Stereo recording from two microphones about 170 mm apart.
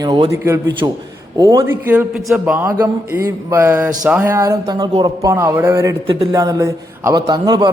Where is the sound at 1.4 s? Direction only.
25° right (ahead or behind).